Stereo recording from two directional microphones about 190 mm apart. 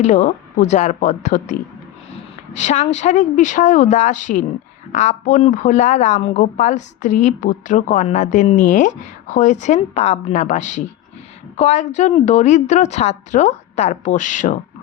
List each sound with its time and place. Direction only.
0.0 s a woman's voice: 40° left (ahead or behind)
2.6 s a woman's voice: 40° left (ahead or behind)